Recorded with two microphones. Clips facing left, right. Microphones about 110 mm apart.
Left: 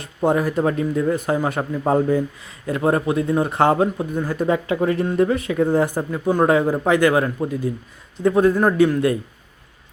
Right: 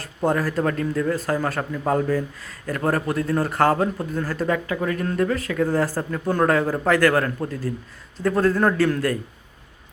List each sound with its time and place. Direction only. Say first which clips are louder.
0.0 s a man's voice: left 3 dB; 20° left (ahead or behind)